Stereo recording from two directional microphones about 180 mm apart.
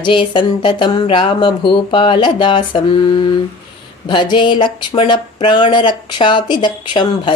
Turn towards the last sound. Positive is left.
turn(degrees=25)  # may be behind; listen again after turning